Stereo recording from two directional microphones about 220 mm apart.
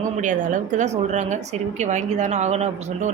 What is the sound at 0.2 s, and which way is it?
A woman's voice, 35° right (ahead or behind).